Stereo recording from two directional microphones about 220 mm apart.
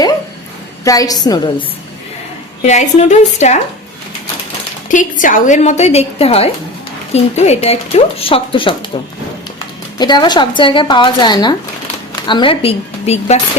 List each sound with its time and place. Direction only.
0.9 s a woman's voice: 15° left (ahead or behind)
2.6 s a woman's voice: 30° left (ahead or behind)
4.9 s a woman's voice: 35° left (ahead or behind)
10.0 s speech: 20° left (ahead or behind)